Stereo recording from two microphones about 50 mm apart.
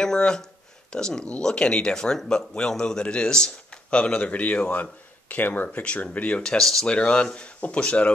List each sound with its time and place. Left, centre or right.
0.0 s a man's voice: centre
6.6 s speech: centre
6.9 s a man's voice: left